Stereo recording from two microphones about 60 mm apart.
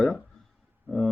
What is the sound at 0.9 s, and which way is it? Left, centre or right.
Speech, right.